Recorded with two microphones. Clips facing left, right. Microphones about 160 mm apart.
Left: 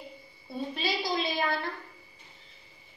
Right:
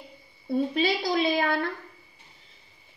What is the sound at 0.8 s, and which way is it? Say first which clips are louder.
Speech: right 6 dB; 55° right (ahead or behind).